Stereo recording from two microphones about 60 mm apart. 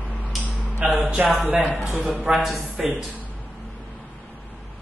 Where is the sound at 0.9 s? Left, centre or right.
Right.